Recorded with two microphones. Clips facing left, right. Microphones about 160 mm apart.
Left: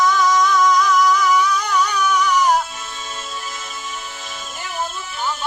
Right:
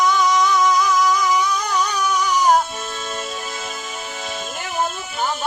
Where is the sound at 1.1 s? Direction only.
15° right (ahead or behind).